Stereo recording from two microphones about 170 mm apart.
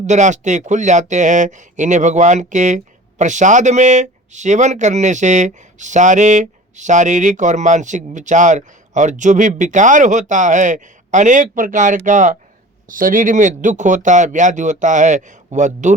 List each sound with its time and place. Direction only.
0.0 s speech: 45° right (ahead or behind)